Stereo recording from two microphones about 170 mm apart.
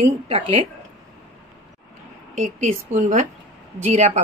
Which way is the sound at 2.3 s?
45° right (ahead or behind).